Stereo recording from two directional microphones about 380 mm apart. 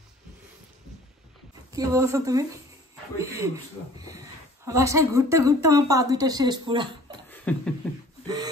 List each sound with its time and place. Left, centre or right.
1.7 s speech: centre
4.6 s speech: centre
7.2 s beatboxing: centre